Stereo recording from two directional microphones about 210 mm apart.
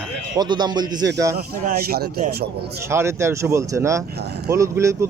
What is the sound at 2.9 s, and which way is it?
Speech, 10° right (ahead or behind).